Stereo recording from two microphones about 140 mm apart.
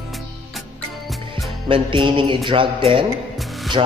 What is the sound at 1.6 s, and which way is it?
Speech, 40° right (ahead or behind).